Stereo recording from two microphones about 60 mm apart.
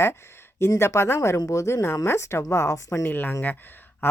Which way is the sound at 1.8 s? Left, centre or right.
Left.